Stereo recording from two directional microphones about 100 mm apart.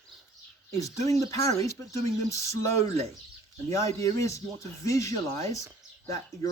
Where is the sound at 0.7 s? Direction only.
35° left (ahead or behind).